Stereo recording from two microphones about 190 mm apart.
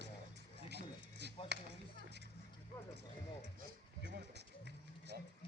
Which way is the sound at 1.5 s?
60° right (ahead or behind).